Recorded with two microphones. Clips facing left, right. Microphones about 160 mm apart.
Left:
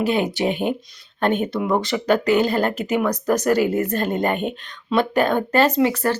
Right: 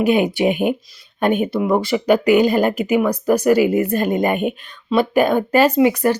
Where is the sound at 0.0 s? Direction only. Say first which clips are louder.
Right 4 dB; 15° right (ahead or behind).